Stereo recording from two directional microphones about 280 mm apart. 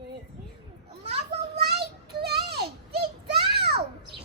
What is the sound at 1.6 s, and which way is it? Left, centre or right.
Child singing, right.